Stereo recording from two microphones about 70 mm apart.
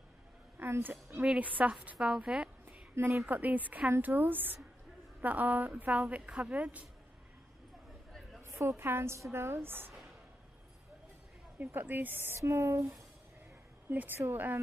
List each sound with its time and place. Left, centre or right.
0.6 s speech: right
1.2 s a woman's voice: centre
3.0 s a woman's voice: right
3.3 s speech: right
8.4 s a woman's voice: right
11.5 s speech: right
12.4 s speech: right
13.8 s speech: right